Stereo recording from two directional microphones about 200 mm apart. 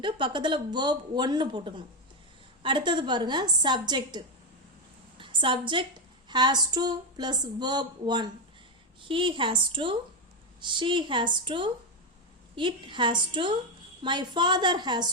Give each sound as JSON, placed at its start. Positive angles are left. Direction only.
{"t": 0.0, "sound": "speech", "side_deg": -25}
{"t": 5.1, "sound": "a sound", "side_deg": -25}
{"t": 6.2, "sound": "speech", "side_deg": -20}